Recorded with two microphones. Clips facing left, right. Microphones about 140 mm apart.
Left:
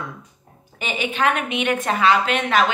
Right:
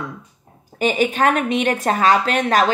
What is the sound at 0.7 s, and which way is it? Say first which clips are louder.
A woman's voice: right 6 dB; 40° right (ahead or behind).